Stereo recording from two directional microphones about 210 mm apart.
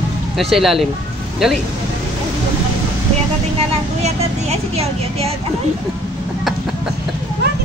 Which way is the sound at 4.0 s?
30° right (ahead or behind).